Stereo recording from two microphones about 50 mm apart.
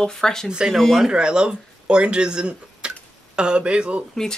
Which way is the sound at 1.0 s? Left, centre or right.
Centre.